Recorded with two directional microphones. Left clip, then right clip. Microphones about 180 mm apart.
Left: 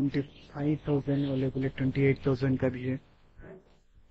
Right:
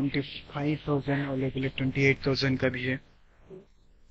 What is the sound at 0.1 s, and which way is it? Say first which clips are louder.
Speech: right 2 dB; 20° left (ahead or behind).